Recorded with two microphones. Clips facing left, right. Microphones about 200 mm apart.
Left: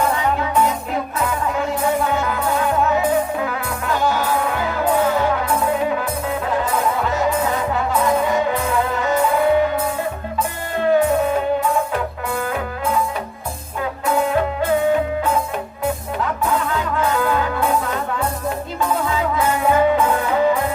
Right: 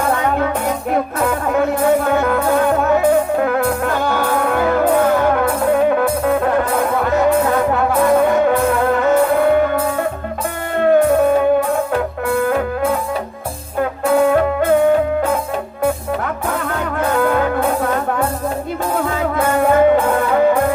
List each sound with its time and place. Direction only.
0.1 s music: 55° right (ahead or behind)
14.0 s music: 55° right (ahead or behind)
16.5 s music: 55° right (ahead or behind)
19.0 s music: 55° right (ahead or behind)